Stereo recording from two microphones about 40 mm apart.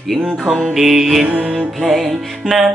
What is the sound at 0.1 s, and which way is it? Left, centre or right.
Music, centre.